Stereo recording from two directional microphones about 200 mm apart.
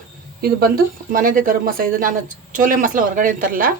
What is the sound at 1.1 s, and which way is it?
A woman's voice, 45° right (ahead or behind).